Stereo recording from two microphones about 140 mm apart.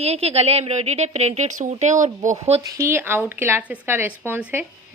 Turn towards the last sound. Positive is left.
turn(degrees=-10)  # may be behind; listen again after turning